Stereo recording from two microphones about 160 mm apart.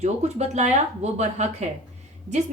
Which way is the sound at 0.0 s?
45° right (ahead or behind).